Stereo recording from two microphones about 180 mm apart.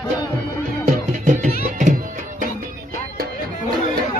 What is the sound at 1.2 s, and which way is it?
Music, 45° right (ahead or behind).